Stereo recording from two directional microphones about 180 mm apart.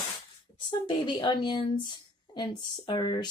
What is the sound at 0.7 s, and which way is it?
Speech, 25° left (ahead or behind).